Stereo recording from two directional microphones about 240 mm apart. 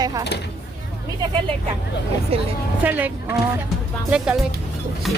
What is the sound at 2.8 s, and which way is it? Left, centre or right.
Speech, centre.